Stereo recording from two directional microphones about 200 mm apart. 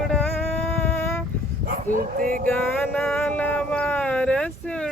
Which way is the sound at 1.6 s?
45° right (ahead or behind).